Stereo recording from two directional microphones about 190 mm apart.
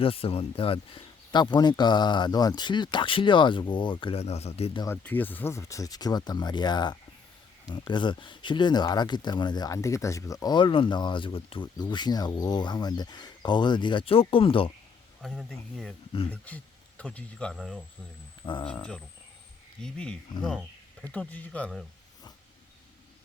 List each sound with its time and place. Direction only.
0.0 s speech: 30° left (ahead or behind)
4.8 s speech: 10° left (ahead or behind); by 14.7 s 30° left (ahead or behind)
15.2 s speech: centre (ahead or behind)
17.0 s speech: 5° left (ahead or behind)
18.4 s speech: 25° left (ahead or behind)
18.7 s speech: 5° left (ahead or behind)